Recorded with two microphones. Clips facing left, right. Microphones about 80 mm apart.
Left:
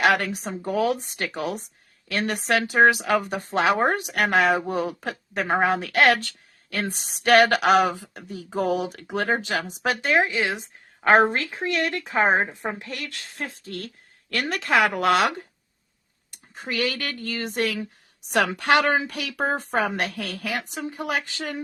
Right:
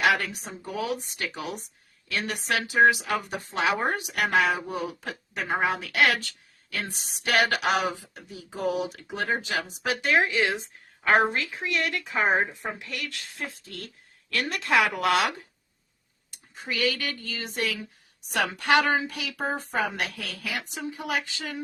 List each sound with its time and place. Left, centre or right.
0.0 s speech: left
8.4 s speech: left
10.1 s speech: left
11.0 s a woman's voice: left
16.6 s speech: left
18.3 s speech: left